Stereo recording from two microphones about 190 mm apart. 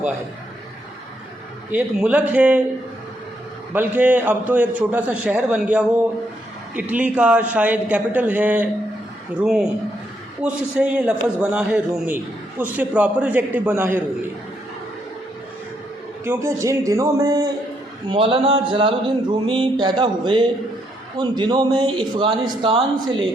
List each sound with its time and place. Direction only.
1.7 s a man's voice: 5° right (ahead or behind)
3.7 s a man's voice: 10° right (ahead or behind)
16.2 s a man's voice: 15° right (ahead or behind)